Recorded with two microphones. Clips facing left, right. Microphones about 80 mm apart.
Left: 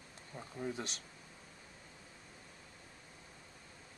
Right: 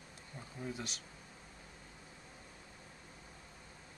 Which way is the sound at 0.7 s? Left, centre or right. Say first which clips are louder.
Left 1 dB; centre.